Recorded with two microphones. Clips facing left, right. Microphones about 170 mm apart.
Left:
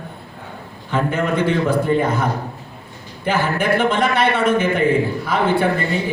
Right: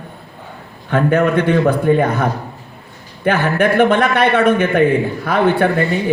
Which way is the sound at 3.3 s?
60° right (ahead or behind).